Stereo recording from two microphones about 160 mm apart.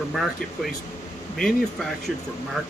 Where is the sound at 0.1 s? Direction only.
Centre (ahead or behind).